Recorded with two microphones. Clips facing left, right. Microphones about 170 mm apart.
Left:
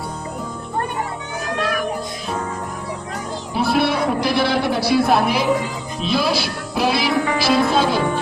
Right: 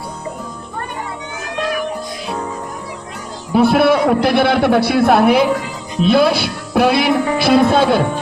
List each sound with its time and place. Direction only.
3.5 s a man's voice: 55° right (ahead or behind)